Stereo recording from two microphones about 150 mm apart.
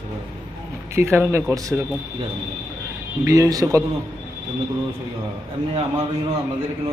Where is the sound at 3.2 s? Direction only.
20° right (ahead or behind).